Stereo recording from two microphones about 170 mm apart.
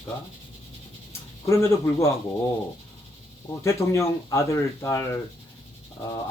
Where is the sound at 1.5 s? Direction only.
15° left (ahead or behind).